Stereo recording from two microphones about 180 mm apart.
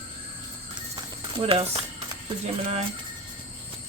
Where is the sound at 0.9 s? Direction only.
25° right (ahead or behind).